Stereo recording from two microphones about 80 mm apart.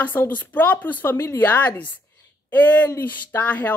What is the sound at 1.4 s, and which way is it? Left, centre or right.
Speech, left.